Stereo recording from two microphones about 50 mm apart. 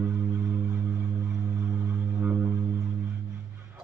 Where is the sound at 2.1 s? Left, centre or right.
Right.